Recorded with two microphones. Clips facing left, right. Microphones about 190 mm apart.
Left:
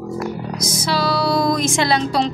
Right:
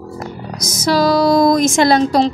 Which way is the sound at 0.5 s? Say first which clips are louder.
Right 8 dB; 40° right (ahead or behind).